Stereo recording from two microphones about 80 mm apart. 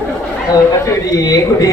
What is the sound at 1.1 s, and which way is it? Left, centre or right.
Speech, left.